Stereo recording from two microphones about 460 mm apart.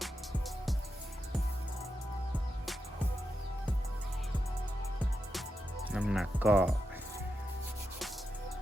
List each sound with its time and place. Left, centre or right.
5.9 s speech: centre